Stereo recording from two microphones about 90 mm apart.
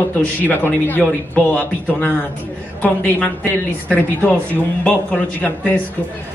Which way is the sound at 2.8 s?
15° left (ahead or behind).